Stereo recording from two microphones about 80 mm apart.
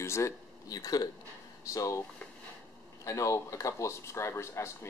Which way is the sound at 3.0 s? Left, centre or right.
Left.